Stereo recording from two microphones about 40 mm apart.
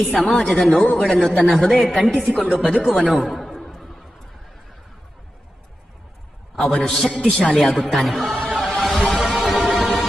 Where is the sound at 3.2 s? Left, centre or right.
Centre.